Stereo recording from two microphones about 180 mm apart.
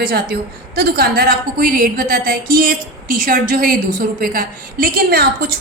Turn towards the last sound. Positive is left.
turn(degrees=-60)  # may be behind; listen again after turning